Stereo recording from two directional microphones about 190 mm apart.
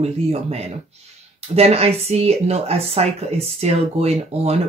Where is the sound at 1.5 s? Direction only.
35° right (ahead or behind).